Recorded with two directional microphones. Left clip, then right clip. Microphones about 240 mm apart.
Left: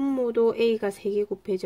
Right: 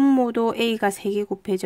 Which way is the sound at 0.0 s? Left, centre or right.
Right.